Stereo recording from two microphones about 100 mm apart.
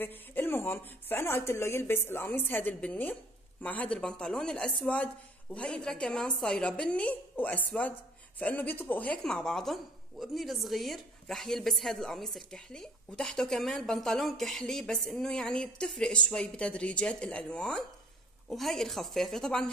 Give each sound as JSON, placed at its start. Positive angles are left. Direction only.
{"t": 0.0, "sound": "speech", "side_deg": 20}
{"t": 9.2, "sound": "a woman's voice", "side_deg": 5}